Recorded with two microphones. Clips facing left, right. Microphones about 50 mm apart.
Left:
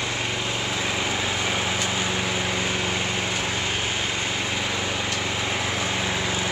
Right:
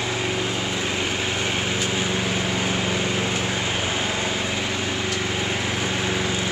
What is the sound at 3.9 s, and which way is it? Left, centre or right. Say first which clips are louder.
Vehicle: right 2 dB; centre.